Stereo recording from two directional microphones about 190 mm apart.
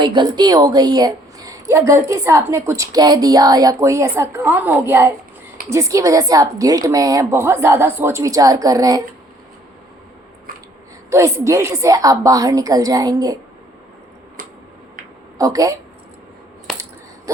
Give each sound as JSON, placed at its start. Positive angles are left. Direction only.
{"t": 0.0, "sound": "a woman's voice", "side_deg": -25}
{"t": 11.1, "sound": "a woman's voice", "side_deg": -15}
{"t": 15.4, "sound": "a woman's voice", "side_deg": -20}